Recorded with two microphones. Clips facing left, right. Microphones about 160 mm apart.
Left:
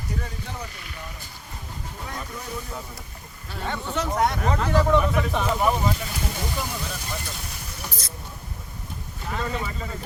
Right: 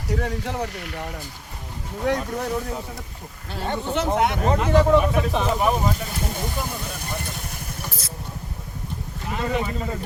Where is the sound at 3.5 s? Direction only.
30° right (ahead or behind).